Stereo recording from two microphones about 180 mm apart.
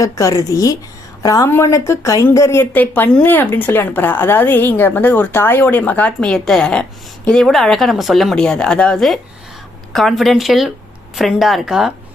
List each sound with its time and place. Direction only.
0.0 s a woman's voice: 15° left (ahead or behind); by 11.9 s centre (ahead or behind)